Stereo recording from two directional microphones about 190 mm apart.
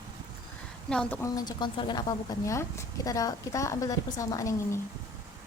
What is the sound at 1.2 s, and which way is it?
Speech, 20° left (ahead or behind).